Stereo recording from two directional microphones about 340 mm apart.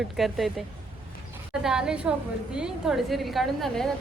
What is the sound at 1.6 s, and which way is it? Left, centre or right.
A woman's voice, centre.